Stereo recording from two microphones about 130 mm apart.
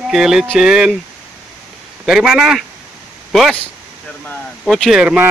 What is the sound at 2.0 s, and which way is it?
Speech, 5° right (ahead or behind).